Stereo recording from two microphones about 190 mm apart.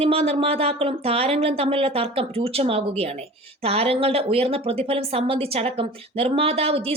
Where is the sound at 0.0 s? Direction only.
30° right (ahead or behind).